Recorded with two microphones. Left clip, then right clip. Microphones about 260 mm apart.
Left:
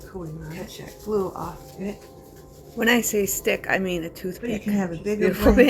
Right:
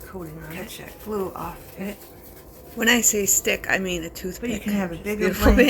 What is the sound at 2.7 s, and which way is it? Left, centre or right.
Speech, centre.